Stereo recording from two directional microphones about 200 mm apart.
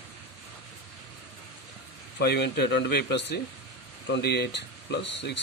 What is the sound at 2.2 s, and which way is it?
Speech, 55° left (ahead or behind).